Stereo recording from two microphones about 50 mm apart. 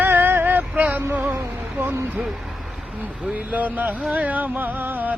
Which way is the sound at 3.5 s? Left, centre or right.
Right.